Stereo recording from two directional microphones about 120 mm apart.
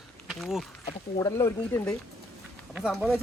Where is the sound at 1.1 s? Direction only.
25° left (ahead or behind).